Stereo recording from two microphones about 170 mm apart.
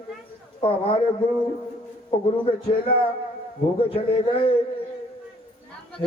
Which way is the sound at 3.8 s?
35° left (ahead or behind).